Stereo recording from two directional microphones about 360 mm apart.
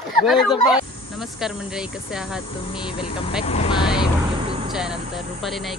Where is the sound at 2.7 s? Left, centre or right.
Centre.